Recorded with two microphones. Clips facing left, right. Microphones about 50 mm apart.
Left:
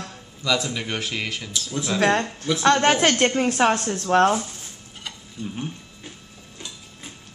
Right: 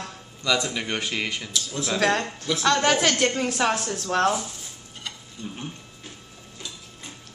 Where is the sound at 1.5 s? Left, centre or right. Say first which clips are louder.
Left 4 dB; left.